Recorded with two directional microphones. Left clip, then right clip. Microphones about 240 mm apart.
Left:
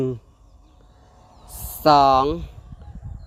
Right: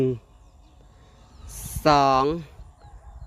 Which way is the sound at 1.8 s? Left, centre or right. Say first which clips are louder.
Left 4 dB; centre.